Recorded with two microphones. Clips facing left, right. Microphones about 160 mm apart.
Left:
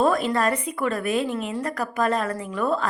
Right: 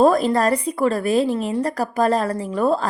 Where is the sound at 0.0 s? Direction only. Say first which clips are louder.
Right 5 dB; 35° right (ahead or behind).